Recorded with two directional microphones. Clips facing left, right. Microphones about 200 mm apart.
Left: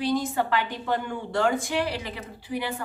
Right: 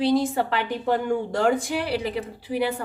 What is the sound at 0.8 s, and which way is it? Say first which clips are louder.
Speech: right 6 dB; 40° right (ahead or behind).